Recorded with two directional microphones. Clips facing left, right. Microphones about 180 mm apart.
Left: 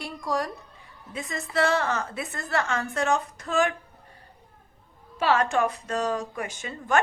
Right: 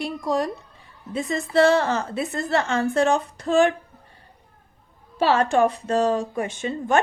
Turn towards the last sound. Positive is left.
turn(degrees=-25)  # may be behind; listen again after turning